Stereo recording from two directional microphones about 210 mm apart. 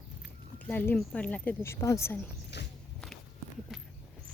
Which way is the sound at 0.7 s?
10° left (ahead or behind).